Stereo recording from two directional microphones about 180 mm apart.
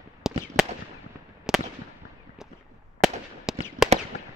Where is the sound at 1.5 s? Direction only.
5° right (ahead or behind).